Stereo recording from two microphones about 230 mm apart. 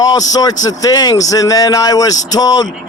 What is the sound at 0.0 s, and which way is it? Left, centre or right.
Speech, centre.